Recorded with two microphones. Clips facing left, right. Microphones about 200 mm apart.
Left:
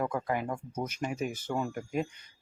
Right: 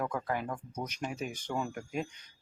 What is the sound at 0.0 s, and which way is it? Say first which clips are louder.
Speech: left 3 dB; 5° left (ahead or behind).